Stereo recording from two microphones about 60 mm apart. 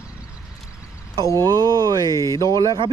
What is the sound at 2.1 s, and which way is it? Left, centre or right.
Speech, left.